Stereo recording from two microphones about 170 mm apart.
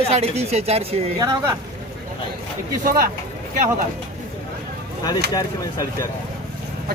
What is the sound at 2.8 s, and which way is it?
Speech, 60° right (ahead or behind).